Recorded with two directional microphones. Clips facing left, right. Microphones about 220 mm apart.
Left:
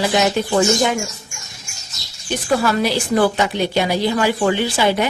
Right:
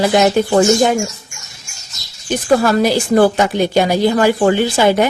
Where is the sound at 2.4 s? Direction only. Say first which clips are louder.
Right 5 dB; 45° right (ahead or behind).